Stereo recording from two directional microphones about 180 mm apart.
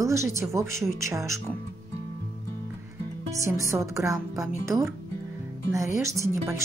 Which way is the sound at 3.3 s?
15° right (ahead or behind).